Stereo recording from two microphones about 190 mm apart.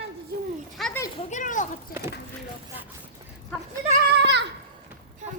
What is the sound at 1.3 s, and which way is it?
Speech, 40° left (ahead or behind).